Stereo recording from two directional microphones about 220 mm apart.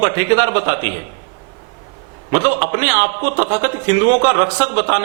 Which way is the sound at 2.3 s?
15° right (ahead or behind).